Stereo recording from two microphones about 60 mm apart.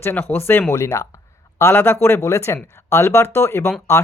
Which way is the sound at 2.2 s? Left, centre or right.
Left.